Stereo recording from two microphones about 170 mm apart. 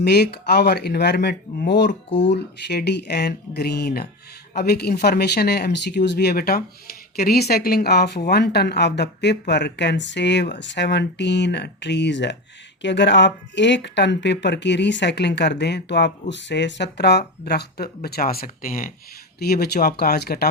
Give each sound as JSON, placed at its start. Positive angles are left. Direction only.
{"t": 0.0, "sound": "a woman's voice", "side_deg": 75}
{"t": 19.4, "sound": "speech", "side_deg": 70}